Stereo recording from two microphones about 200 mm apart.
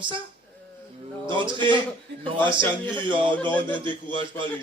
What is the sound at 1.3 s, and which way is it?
Speech, 25° right (ahead or behind).